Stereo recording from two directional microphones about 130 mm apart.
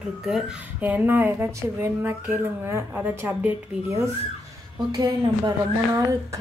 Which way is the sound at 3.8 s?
25° right (ahead or behind).